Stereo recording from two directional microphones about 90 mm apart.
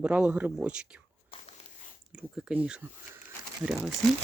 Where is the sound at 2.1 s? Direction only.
10° right (ahead or behind).